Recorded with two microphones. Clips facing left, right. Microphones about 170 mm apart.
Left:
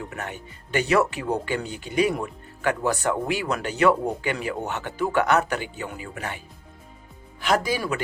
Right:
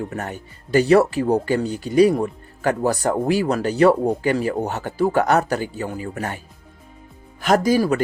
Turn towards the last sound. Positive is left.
turn(degrees=-40)  # may be behind; listen again after turning